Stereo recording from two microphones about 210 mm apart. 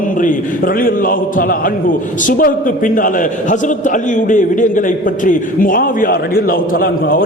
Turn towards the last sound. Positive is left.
turn(degrees=45)  # may be behind; listen again after turning